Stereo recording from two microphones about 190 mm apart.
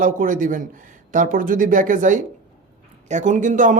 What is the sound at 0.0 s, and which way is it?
Speech, 45° right (ahead or behind).